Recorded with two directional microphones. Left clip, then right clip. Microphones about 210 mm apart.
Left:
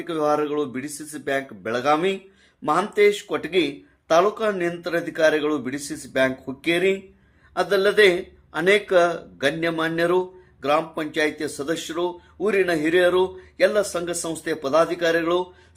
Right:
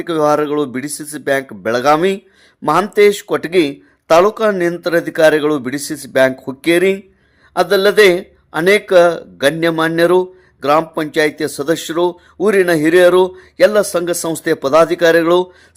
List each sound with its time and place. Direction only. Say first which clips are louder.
0.0 s a man's voice: right 8 dB; 45° right (ahead or behind)